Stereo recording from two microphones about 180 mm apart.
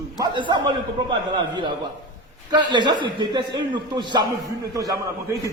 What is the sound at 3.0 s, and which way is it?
A man's voice, 25° right (ahead or behind).